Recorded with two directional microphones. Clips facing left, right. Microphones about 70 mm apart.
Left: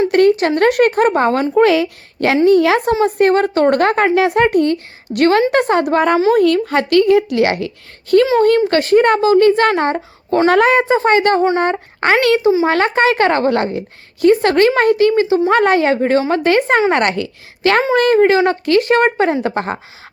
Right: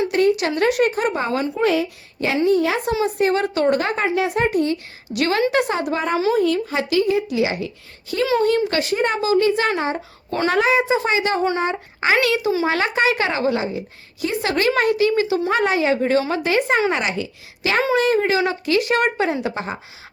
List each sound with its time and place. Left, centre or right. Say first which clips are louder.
0.1 s a sound: left 6 dB; left
0.3 s a woman's voice: left 6 dB; left
1.6 s speech: left 6 dB; left
2.3 s speech: left 7 dB; left
3.2 s a woman's voice: left 7 dB; left
8.4 s a woman's voice: left 6 dB; left
10.2 s speech: left 8 dB; left
10.5 s a woman's voice: left 4 dB; left
12.4 s a child's voice: left 7 dB; left
12.6 s a woman's voice: left 5 dB; left
15.5 s a woman's voice: left 5 dB; left
16.9 s speech: left 7 dB; left
17.6 s a woman's voice: left 5 dB; left